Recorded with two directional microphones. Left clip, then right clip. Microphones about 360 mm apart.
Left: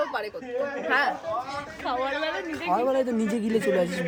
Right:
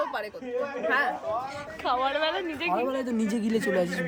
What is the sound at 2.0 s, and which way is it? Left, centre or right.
Speech, centre.